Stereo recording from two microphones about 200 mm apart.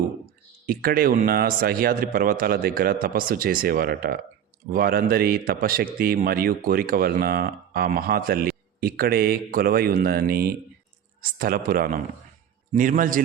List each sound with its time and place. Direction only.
0.7 s a man's voice: 45° right (ahead or behind)